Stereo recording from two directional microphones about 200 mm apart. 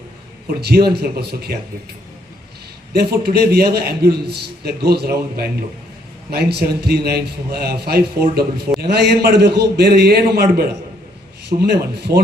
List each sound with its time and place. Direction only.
0.6 s a man's voice: 50° right (ahead or behind)
3.0 s a man's voice: 50° right (ahead or behind)
6.3 s a man's voice: 55° right (ahead or behind)